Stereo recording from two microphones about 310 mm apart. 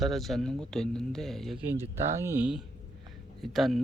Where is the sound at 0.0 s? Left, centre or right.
Centre.